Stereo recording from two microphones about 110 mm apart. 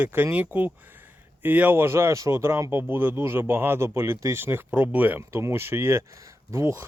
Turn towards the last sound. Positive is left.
turn(degrees=-25)  # may be behind; listen again after turning